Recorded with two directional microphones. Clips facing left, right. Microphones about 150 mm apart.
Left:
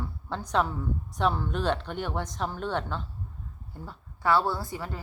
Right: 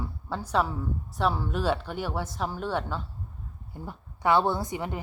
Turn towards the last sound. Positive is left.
turn(degrees=-20)  # may be behind; listen again after turning